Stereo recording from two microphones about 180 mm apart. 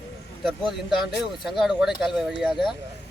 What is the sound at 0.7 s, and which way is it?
Speech, centre (ahead or behind).